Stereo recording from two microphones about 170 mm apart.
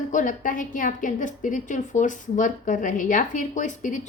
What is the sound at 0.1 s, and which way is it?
A woman's voice, 50° left (ahead or behind).